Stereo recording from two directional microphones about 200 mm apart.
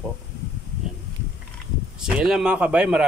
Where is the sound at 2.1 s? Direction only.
5° right (ahead or behind).